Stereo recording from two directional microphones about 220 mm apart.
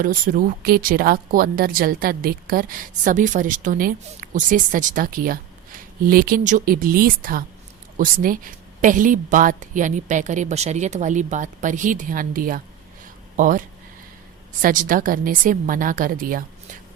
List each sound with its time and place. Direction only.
0.0 s speech: 40° right (ahead or behind)